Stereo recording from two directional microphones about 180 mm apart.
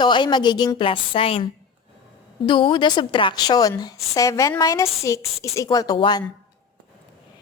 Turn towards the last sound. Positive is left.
turn(degrees=25)  # may be behind; listen again after turning